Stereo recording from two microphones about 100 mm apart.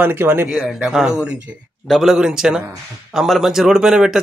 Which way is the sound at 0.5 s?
5° right (ahead or behind).